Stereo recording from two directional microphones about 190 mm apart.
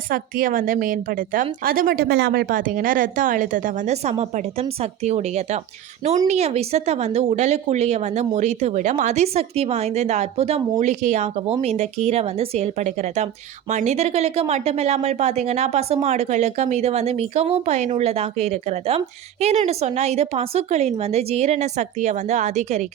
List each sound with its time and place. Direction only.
0.1 s a woman's voice: 45° right (ahead or behind)